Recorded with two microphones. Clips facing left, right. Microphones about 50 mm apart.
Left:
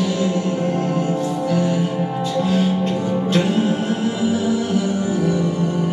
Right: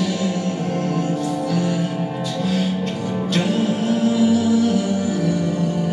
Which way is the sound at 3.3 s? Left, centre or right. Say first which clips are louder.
Left 1 dB; left.